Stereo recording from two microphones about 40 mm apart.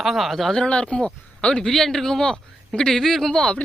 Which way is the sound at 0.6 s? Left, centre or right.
Left.